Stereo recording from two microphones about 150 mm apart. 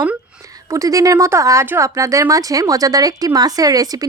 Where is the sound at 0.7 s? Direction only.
20° right (ahead or behind).